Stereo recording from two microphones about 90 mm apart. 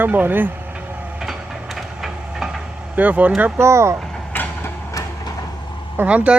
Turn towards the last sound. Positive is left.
turn(degrees=-15)  # may be behind; listen again after turning